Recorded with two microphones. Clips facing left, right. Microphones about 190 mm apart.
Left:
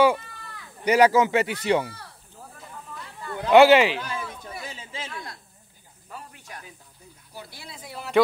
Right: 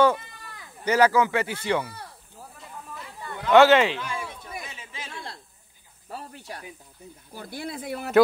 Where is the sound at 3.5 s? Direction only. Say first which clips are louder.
Left 2 dB; 10° left (ahead or behind).